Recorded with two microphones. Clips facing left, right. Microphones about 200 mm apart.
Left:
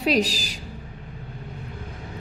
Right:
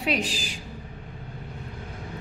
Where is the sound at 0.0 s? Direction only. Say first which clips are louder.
Left 5 dB; 35° left (ahead or behind).